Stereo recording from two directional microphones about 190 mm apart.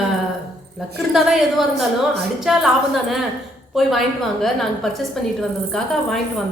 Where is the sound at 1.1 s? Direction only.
Centre (ahead or behind).